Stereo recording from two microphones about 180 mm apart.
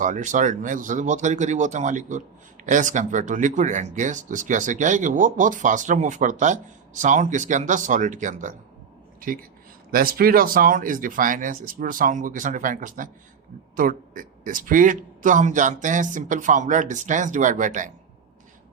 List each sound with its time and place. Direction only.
0.0 s speech: 45° right (ahead or behind)
9.9 s speech: 55° right (ahead or behind)